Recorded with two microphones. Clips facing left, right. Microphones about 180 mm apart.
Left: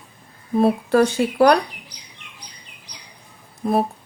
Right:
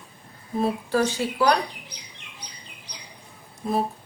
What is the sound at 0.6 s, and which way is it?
Speech, 60° left (ahead or behind).